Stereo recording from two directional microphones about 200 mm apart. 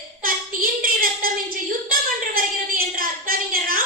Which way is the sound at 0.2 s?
45° right (ahead or behind).